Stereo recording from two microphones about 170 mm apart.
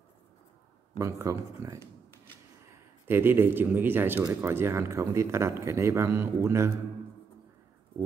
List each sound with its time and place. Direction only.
0.9 s a man's voice: 20° right (ahead or behind)
3.1 s a man's voice: 15° right (ahead or behind)